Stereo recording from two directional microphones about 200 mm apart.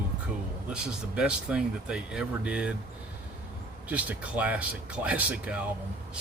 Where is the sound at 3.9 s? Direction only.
5° right (ahead or behind).